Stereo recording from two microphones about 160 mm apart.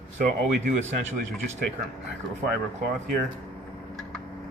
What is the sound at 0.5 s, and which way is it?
Speech, 50° right (ahead or behind).